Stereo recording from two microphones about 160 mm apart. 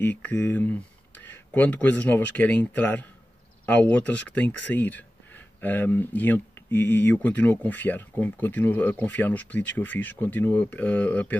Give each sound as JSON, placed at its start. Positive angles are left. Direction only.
{"t": 0.0, "sound": "speech", "side_deg": 10}